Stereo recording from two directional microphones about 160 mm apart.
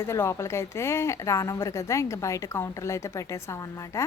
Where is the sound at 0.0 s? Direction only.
15° left (ahead or behind).